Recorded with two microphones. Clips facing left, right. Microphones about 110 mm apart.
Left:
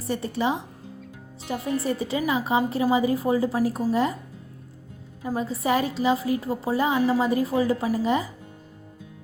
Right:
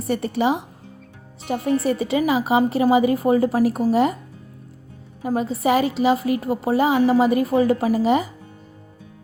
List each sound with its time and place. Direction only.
0.0 s a woman's voice: 70° right (ahead or behind)
5.2 s a woman's voice: 70° right (ahead or behind)